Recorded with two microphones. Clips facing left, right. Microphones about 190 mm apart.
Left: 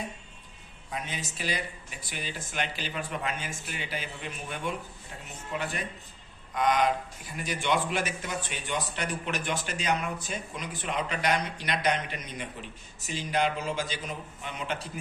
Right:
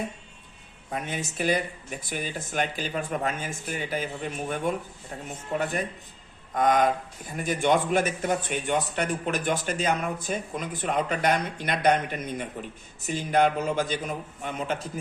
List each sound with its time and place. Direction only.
0.9 s a man's voice: 50° right (ahead or behind)
6.5 s a man's voice: 50° right (ahead or behind)